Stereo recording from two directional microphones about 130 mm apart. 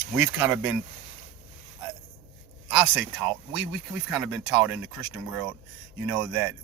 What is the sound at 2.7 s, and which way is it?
Speech, 5° right (ahead or behind).